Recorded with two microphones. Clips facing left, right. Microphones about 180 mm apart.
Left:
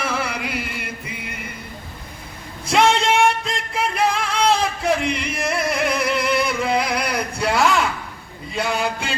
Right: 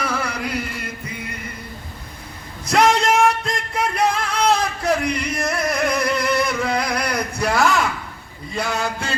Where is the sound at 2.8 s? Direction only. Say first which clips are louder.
Right 1 dB; 30° left (ahead or behind).